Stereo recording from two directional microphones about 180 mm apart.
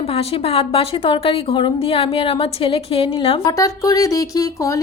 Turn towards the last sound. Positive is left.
turn(degrees=20)  # may be behind; listen again after turning